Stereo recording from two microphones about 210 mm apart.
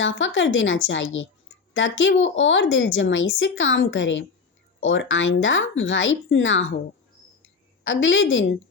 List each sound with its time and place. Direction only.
0.0 s speech: 65° left (ahead or behind)
7.9 s speech: 65° left (ahead or behind)